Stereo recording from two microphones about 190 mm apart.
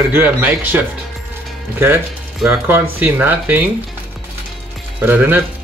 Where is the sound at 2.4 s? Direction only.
10° right (ahead or behind).